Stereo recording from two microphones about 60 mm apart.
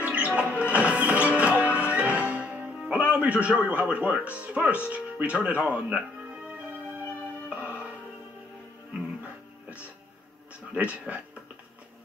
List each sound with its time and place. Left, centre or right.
0.0 s music: right
3.0 s a man's voice: right
5.9 s music: centre
9.2 s music: right
10.7 s a man's voice: right